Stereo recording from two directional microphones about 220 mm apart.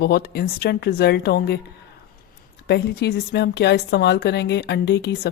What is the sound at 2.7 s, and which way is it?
Speech, 50° left (ahead or behind).